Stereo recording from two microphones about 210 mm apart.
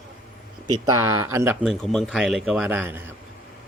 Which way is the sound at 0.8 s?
10° right (ahead or behind).